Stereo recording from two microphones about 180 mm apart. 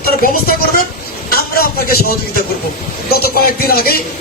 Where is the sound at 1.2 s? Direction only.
55° left (ahead or behind).